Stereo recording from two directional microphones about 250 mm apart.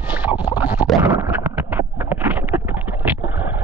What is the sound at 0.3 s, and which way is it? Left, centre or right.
Scratch, centre.